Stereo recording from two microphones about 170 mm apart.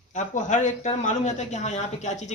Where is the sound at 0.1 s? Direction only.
45° left (ahead or behind).